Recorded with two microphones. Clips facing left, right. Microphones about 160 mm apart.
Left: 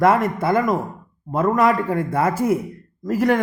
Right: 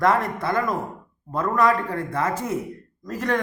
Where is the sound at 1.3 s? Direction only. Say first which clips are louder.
Left 3 dB; 20° left (ahead or behind).